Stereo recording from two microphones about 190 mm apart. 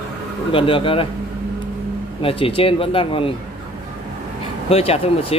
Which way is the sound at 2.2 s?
30° left (ahead or behind).